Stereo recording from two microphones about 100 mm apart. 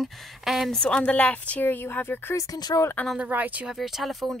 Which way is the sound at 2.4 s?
40° left (ahead or behind).